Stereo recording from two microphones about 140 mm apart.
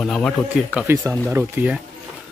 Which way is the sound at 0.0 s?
5° left (ahead or behind).